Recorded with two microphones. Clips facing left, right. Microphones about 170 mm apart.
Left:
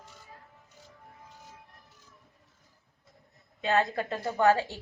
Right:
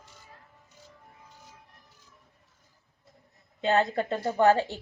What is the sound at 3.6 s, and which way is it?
Speech, 25° right (ahead or behind).